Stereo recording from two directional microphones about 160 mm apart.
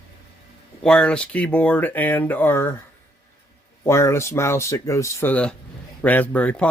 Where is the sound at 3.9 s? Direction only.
20° left (ahead or behind).